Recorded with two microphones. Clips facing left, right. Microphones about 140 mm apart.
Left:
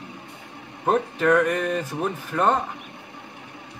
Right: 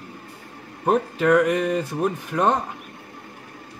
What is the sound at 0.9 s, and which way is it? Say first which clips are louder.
Speech: right 1 dB; 10° right (ahead or behind).